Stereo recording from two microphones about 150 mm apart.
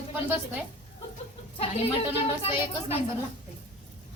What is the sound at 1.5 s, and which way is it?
Speech, 40° left (ahead or behind).